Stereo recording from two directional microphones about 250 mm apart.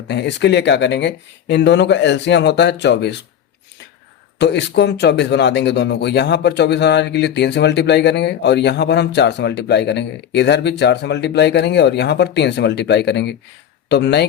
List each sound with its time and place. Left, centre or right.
0.1 s speech: left
4.4 s speech: left